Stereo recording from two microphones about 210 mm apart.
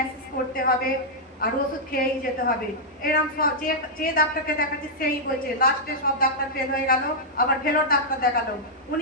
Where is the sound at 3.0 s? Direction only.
45° left (ahead or behind).